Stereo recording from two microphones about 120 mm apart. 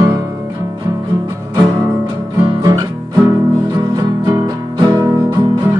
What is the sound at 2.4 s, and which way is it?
Guitar, 30° right (ahead or behind).